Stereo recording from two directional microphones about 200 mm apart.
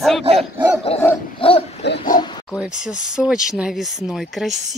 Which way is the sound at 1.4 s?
30° left (ahead or behind).